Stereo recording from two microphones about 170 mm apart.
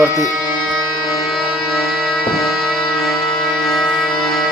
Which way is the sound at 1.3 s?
Centre (ahead or behind).